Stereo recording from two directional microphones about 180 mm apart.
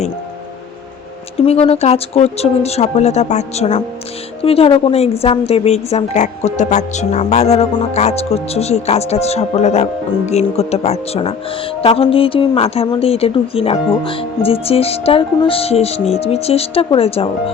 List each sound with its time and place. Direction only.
1.4 s speech: 30° left (ahead or behind)